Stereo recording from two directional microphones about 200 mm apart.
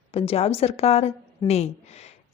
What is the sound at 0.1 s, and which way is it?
A woman's voice, 30° left (ahead or behind).